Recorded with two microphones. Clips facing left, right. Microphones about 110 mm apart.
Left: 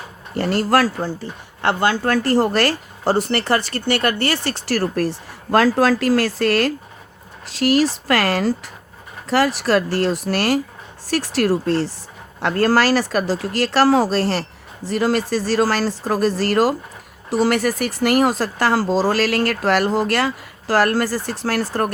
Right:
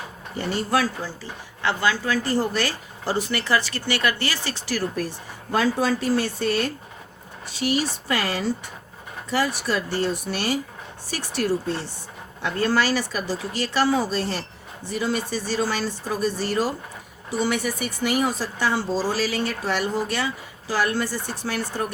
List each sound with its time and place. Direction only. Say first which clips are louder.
0.3 s speech: left 6 dB; 80° left
0.9 s speech: left 7 dB; 60° left (ahead or behind); by 11.9 s 90° left
12.4 s speech: left 6 dB; 75° left (ahead or behind)